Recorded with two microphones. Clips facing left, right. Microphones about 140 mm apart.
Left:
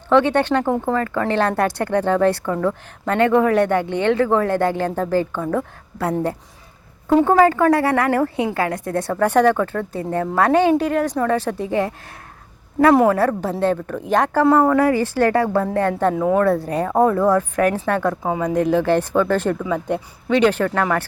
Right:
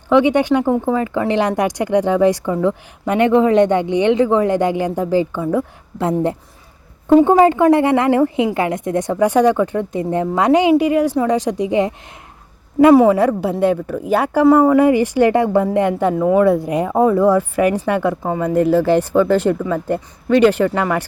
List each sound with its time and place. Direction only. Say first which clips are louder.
0.1 s a woman's voice: right 3 dB; 15° right (ahead or behind)
13.1 s a woman's voice: right 3 dB; 15° right (ahead or behind)
18.2 s a woman's voice: right 3 dB; centre (ahead or behind)
19.6 s a woman's voice: right 2 dB; centre (ahead or behind)